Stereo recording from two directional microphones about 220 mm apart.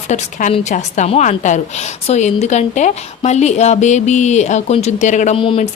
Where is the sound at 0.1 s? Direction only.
35° left (ahead or behind).